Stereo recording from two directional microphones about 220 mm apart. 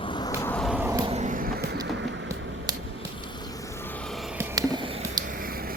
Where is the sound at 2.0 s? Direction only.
55° right (ahead or behind).